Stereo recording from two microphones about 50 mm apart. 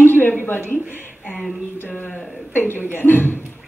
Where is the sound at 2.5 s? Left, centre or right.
Left.